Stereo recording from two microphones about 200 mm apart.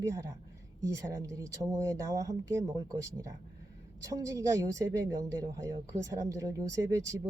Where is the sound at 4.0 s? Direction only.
15° right (ahead or behind).